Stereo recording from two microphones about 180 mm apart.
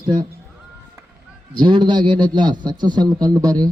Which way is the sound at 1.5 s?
25° right (ahead or behind).